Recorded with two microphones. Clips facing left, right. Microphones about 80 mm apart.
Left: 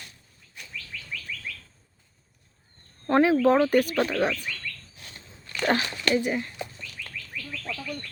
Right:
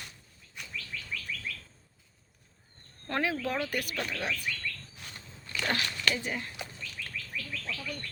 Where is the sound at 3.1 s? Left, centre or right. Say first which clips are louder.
Left 12 dB; left.